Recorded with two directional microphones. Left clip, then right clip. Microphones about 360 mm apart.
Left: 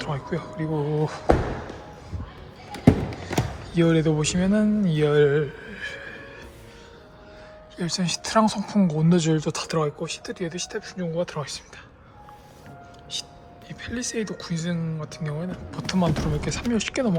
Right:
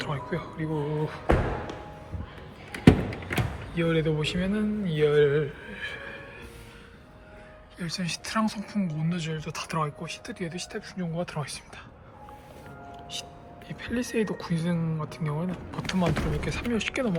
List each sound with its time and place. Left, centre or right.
0.0 s speech: centre
3.2 s speech: centre
7.8 s speech: centre
13.1 s speech: centre